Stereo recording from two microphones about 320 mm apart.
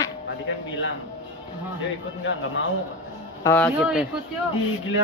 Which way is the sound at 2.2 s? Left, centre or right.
Left.